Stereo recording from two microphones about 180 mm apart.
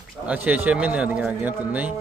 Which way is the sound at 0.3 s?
10° right (ahead or behind).